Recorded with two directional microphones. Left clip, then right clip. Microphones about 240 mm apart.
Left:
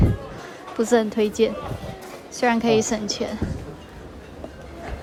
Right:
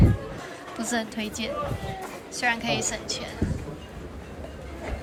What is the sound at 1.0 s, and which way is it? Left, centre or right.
A woman's voice, left.